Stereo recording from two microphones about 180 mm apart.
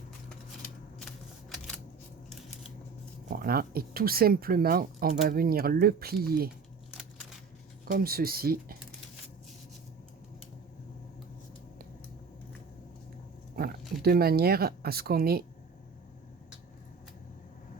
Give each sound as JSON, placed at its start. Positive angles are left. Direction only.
{"t": 1.5, "sound": "camera", "side_deg": 5}
{"t": 3.2, "sound": "speech", "side_deg": -55}
{"t": 7.9, "sound": "speech", "side_deg": -55}
{"t": 13.6, "sound": "speech", "side_deg": -60}